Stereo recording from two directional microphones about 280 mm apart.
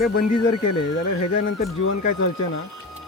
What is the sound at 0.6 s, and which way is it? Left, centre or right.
Speech, left.